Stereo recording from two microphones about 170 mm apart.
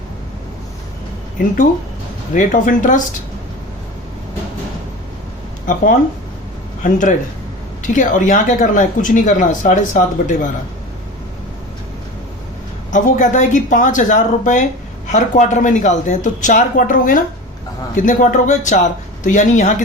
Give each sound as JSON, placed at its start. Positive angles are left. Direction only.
{"t": 2.3, "sound": "a woman's voice", "side_deg": 50}
{"t": 5.6, "sound": "a woman's voice", "side_deg": 50}
{"t": 12.9, "sound": "a woman's voice", "side_deg": 45}